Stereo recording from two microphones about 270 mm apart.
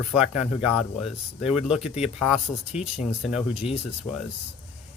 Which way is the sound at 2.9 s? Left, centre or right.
Left.